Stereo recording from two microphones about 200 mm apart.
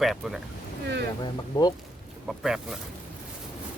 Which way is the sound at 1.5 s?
20° left (ahead or behind).